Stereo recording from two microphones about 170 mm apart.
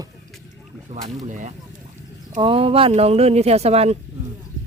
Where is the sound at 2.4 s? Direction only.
30° right (ahead or behind).